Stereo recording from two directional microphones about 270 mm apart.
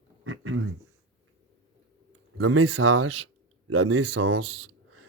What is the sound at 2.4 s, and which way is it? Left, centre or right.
Speech, right.